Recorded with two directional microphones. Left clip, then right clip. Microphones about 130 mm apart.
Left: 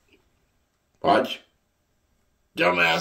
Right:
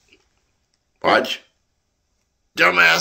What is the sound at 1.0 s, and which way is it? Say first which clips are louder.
Speech: right 4 dB; 10° left (ahead or behind).